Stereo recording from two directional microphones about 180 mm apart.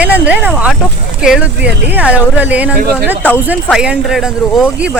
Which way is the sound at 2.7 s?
55° right (ahead or behind).